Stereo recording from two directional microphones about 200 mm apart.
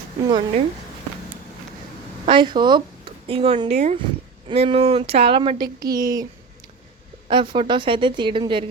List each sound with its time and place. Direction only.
0.3 s speech: 25° right (ahead or behind)
2.2 s speech: 25° right (ahead or behind)
7.3 s speech: 25° right (ahead or behind)